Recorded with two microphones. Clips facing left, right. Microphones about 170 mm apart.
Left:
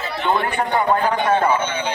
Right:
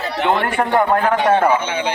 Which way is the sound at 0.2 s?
75° right (ahead or behind).